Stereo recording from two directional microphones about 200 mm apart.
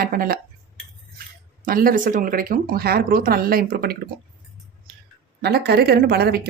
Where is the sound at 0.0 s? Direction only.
45° right (ahead or behind).